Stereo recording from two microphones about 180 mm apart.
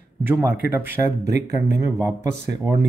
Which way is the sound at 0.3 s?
10° right (ahead or behind).